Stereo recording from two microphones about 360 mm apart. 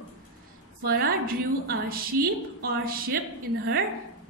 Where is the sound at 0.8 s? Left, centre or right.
Right.